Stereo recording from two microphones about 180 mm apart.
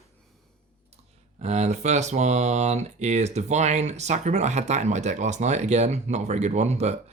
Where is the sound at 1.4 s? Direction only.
40° right (ahead or behind).